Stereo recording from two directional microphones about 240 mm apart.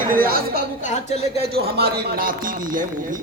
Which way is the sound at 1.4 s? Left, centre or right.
Right.